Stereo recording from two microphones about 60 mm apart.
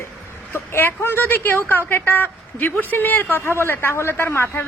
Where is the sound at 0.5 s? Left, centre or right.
Left.